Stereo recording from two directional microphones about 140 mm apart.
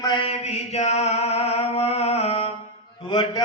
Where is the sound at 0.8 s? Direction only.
50° left (ahead or behind).